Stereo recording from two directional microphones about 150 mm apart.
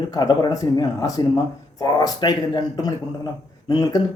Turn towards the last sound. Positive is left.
turn(degrees=25)  # may be behind; listen again after turning